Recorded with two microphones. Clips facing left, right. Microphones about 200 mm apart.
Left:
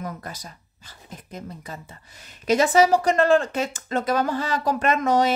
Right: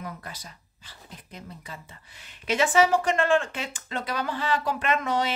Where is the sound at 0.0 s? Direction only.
45° left (ahead or behind).